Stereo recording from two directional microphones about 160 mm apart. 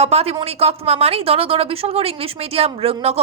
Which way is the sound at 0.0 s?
40° right (ahead or behind).